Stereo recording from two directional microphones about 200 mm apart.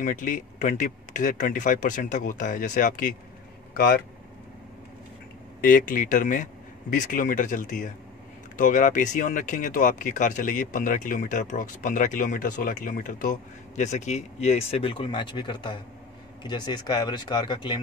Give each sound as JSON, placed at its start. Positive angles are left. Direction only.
{"t": 0.0, "sound": "speech", "side_deg": 40}
{"t": 5.6, "sound": "speech", "side_deg": 45}